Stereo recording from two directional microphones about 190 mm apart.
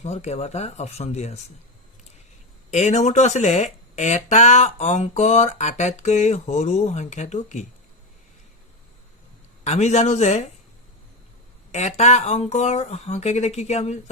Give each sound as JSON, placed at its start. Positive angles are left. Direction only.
{"t": 0.0, "sound": "speech", "side_deg": 35}
{"t": 2.6, "sound": "speech", "side_deg": 40}
{"t": 9.6, "sound": "speech", "side_deg": 35}
{"t": 11.7, "sound": "speech", "side_deg": 35}